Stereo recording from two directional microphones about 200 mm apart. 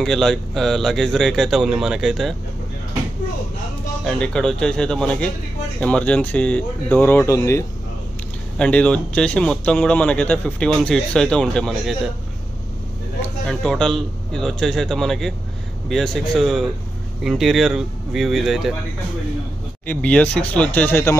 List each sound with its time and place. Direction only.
0.0 s speech: centre (ahead or behind)
4.0 s speech: 5° left (ahead or behind)
13.5 s speech: centre (ahead or behind)
19.9 s speech: 5° left (ahead or behind)